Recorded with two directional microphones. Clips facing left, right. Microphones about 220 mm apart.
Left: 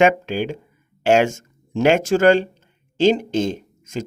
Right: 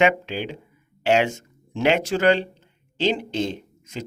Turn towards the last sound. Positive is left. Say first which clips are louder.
# left 5 dB
turn(degrees=45)  # may be behind; listen again after turning